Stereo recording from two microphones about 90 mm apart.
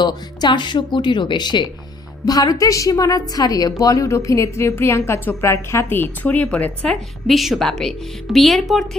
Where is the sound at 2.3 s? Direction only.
45° left (ahead or behind).